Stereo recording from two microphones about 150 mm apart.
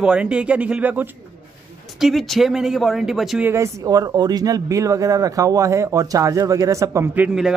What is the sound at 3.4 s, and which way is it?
Speech, 20° right (ahead or behind).